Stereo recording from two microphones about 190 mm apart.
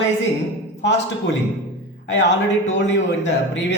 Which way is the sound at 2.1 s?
70° left (ahead or behind).